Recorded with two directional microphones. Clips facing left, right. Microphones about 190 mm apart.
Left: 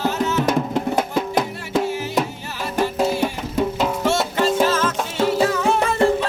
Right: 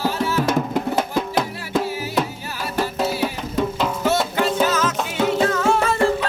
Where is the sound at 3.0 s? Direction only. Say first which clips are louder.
Left 2 dB; 5° right (ahead or behind).